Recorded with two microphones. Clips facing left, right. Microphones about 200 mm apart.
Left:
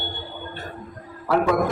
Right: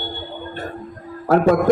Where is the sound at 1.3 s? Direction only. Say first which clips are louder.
Right 5 dB; 45° right (ahead or behind).